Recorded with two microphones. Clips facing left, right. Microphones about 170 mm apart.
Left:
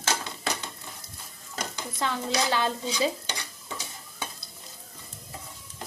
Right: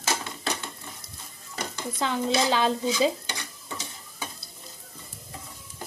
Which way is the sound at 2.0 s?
20° right (ahead or behind).